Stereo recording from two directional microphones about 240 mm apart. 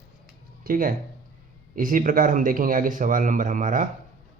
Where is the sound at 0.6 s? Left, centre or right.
Right.